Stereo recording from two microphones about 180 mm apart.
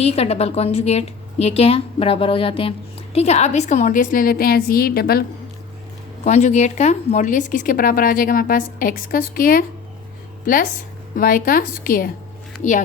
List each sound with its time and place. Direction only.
0.0 s a woman's voice: 35° left (ahead or behind); by 5.2 s 55° left (ahead or behind)
6.2 s a woman's voice: 40° left (ahead or behind)